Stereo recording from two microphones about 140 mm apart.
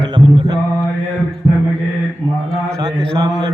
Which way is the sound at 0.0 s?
35° right (ahead or behind).